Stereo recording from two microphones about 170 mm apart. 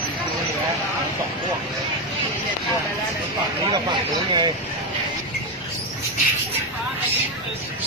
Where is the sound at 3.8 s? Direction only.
25° right (ahead or behind).